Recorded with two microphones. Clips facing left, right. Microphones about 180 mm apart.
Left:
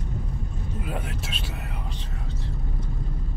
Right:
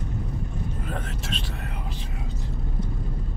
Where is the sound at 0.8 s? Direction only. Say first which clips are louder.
Even; 5° left (ahead or behind).